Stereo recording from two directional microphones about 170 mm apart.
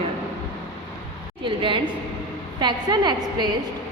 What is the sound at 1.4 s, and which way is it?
A woman's voice, 30° right (ahead or behind).